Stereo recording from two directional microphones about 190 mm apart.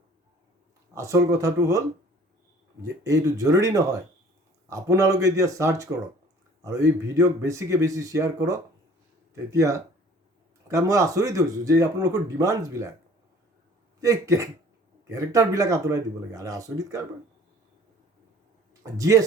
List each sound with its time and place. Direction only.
0.9 s speech: 15° right (ahead or behind)
2.8 s speech: 15° right (ahead or behind)
14.0 s speech: 15° right (ahead or behind)
18.7 s speech: 15° right (ahead or behind)